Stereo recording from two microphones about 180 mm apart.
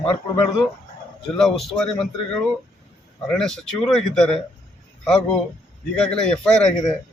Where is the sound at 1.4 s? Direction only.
Centre (ahead or behind).